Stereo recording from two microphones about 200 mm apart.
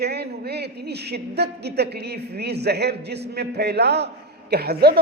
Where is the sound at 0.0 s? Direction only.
55° right (ahead or behind).